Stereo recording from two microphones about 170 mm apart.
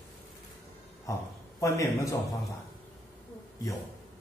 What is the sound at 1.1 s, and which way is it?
A man's voice, 20° left (ahead or behind).